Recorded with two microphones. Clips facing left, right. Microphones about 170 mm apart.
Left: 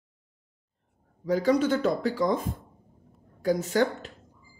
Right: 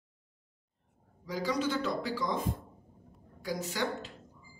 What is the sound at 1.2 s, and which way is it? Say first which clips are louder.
Speech: left 9 dB; 55° left (ahead or behind).